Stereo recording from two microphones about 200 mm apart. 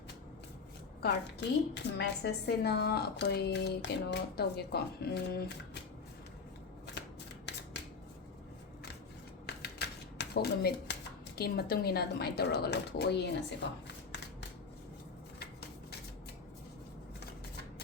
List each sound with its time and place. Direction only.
1.0 s a woman's voice: 60° left (ahead or behind)
9.5 s shuffling cards: 55° left (ahead or behind)
11.3 s a woman's voice: 50° left (ahead or behind)